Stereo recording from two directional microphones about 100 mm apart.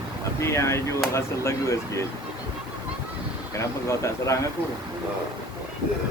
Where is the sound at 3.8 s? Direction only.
30° left (ahead or behind).